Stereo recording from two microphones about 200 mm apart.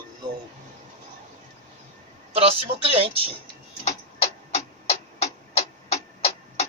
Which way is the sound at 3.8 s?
30° left (ahead or behind).